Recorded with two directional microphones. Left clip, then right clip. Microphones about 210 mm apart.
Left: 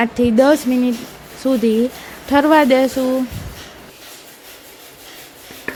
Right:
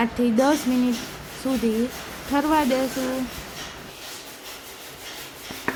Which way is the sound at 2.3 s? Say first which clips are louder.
Left 9 dB; 20° left (ahead or behind).